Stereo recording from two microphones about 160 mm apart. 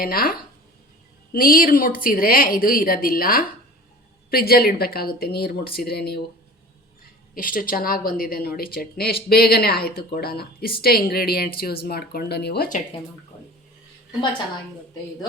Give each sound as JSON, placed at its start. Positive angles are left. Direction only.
{"t": 0.0, "sound": "a woman's voice", "side_deg": 65}
{"t": 7.3, "sound": "a woman's voice", "side_deg": 65}